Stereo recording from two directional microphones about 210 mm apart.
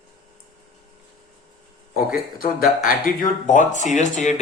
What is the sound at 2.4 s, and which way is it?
A man's voice, 45° left (ahead or behind).